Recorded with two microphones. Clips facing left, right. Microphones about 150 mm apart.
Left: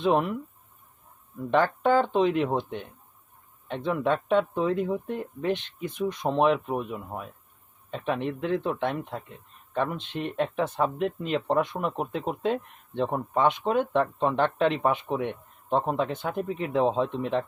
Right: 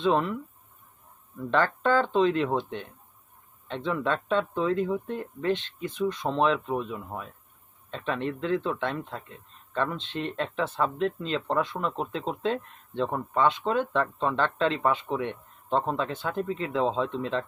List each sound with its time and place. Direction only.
0.0 s speech: 15° left (ahead or behind)
1.4 s speech: 15° left (ahead or behind)